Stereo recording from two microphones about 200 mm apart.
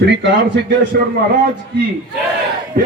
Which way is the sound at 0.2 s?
60° right (ahead or behind).